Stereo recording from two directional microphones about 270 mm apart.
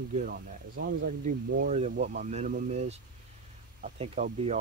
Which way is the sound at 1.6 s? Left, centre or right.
Right.